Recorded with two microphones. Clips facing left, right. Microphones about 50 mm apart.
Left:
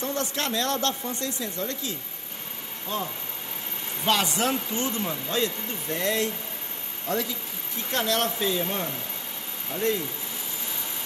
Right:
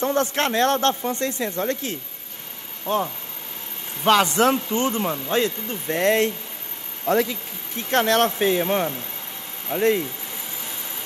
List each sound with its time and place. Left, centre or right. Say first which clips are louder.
0.0 s speech: right 7 dB; right